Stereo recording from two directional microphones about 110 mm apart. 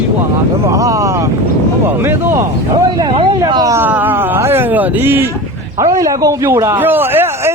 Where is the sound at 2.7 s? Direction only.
40° right (ahead or behind).